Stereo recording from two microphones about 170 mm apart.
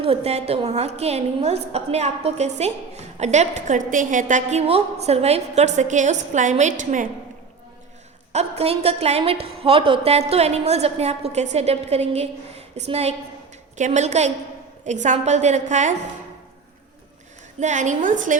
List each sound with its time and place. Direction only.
0.0 s a woman's voice: 35° right (ahead or behind)
8.3 s a woman's voice: 40° right (ahead or behind)
17.6 s a woman's voice: 45° right (ahead or behind)